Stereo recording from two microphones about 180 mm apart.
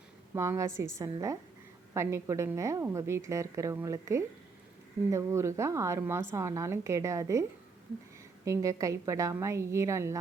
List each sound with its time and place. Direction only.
0.3 s a woman's voice: 15° right (ahead or behind)
8.4 s a woman's voice: 20° right (ahead or behind)